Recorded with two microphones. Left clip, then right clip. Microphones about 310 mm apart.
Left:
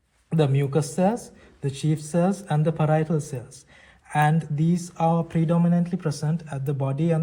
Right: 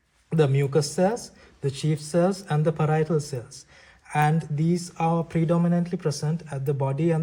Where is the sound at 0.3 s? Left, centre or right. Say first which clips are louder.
Right 1 dB; right.